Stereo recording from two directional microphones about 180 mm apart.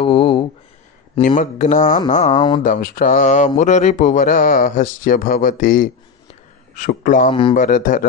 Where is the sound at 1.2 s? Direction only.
45° left (ahead or behind).